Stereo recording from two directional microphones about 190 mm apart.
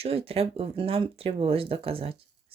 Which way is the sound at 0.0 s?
30° right (ahead or behind).